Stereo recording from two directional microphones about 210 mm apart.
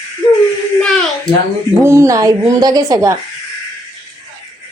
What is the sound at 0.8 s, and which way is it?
Speech, centre (ahead or behind).